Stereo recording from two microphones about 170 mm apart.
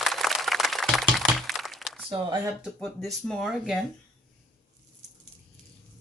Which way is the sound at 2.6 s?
5° left (ahead or behind).